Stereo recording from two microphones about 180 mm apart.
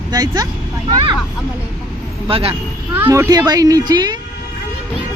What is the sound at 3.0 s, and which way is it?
Speech, 15° right (ahead or behind).